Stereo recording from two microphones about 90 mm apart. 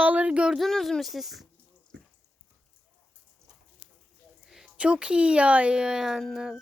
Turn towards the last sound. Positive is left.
turn(degrees=-5)  # may be behind; listen again after turning